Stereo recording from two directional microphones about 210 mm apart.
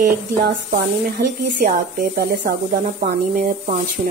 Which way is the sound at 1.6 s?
45° right (ahead or behind).